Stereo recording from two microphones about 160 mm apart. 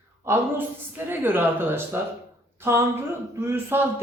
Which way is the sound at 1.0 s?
15° right (ahead or behind).